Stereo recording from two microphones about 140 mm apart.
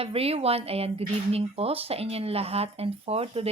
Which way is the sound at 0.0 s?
45° right (ahead or behind).